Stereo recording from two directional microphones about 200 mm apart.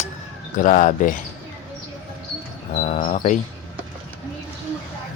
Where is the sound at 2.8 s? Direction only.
35° left (ahead or behind).